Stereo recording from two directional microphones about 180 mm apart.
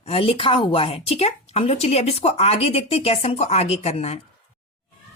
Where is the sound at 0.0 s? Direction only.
30° left (ahead or behind).